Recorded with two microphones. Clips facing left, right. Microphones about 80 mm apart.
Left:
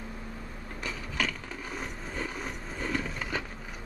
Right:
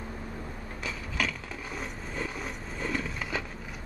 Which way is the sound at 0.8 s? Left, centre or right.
Centre.